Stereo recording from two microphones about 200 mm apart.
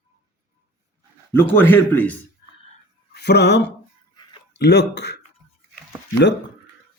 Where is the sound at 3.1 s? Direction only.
55° left (ahead or behind).